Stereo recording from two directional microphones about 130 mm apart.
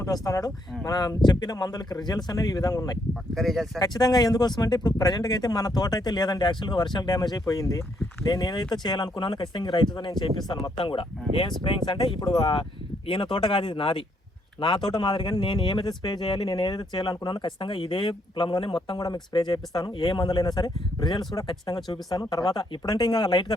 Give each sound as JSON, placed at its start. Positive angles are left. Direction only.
{"t": 0.0, "sound": "speech", "side_deg": 25}
{"t": 3.3, "sound": "speech", "side_deg": 0}
{"t": 3.8, "sound": "speech", "side_deg": 30}